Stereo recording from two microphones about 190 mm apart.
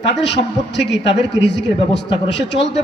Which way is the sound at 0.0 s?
70° left (ahead or behind).